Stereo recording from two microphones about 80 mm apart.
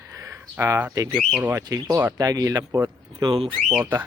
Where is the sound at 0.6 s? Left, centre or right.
Right.